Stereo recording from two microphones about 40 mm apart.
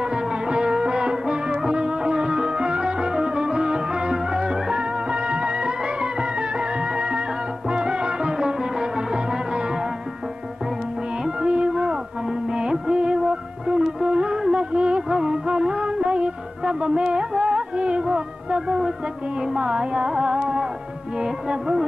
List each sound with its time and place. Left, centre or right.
0.0 s music: right
11.2 s music: right
19.4 s carnatic music: right
21.2 s music: right